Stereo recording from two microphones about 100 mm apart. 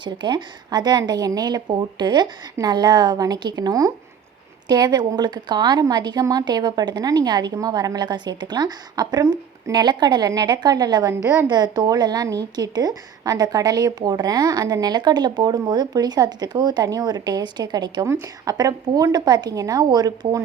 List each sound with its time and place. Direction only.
0.0 s a woman's voice: 50° right (ahead or behind)
11.1 s a woman's voice: 25° right (ahead or behind)
11.4 s a woman's voice: 45° right (ahead or behind)
18.0 s a woman's voice: 30° right (ahead or behind)